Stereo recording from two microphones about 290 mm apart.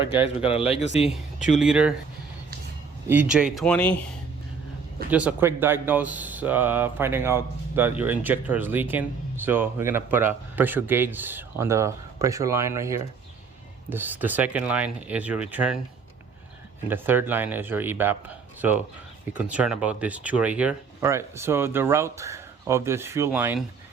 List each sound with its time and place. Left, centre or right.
0.3 s speech: left
1.5 s speech: centre
3.1 s speech: centre
5.1 s speech: centre
16.9 s speech: centre